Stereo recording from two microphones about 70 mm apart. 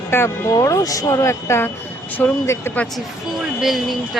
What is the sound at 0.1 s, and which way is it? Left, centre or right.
Speech, left.